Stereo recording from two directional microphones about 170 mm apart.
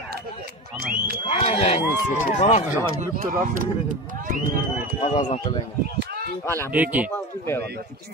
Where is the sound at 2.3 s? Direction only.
45° left (ahead or behind).